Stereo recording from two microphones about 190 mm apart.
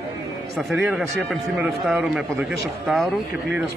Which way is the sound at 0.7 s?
Centre (ahead or behind).